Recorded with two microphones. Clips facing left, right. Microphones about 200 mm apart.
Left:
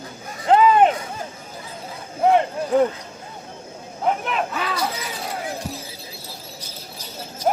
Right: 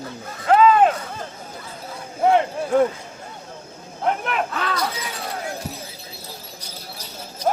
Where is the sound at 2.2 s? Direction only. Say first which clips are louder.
Even; centre (ahead or behind).